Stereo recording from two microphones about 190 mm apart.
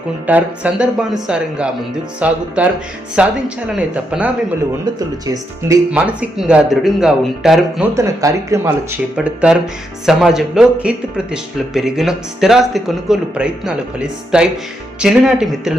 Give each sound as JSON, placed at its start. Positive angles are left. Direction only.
{"t": 0.3, "sound": "speech", "side_deg": -5}
{"t": 4.9, "sound": "speech", "side_deg": -20}
{"t": 7.9, "sound": "speech", "side_deg": -15}